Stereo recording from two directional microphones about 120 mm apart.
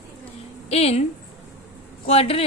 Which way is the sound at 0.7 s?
60° left (ahead or behind).